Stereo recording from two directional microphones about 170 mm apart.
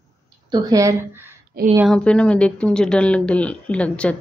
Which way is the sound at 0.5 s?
20° right (ahead or behind).